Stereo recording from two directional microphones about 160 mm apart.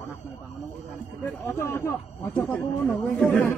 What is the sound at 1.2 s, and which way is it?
Speech, 15° left (ahead or behind).